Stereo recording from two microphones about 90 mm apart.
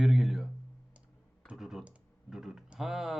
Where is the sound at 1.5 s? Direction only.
5° right (ahead or behind).